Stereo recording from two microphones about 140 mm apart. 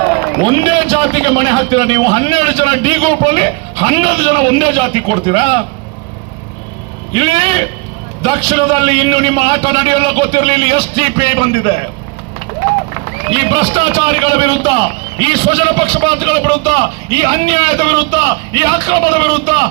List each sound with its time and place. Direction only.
0.4 s a man's voice: 35° right (ahead or behind)
7.1 s a man's voice: 35° right (ahead or behind)
13.3 s a man's voice: 35° right (ahead or behind)